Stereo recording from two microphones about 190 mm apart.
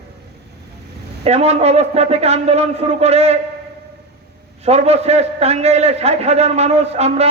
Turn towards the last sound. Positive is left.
turn(degrees=-35)  # may be behind; listen again after turning